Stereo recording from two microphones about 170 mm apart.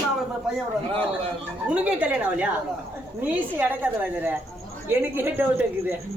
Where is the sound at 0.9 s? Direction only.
30° right (ahead or behind).